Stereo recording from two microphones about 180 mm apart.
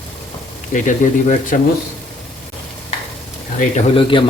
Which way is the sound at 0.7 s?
45° left (ahead or behind).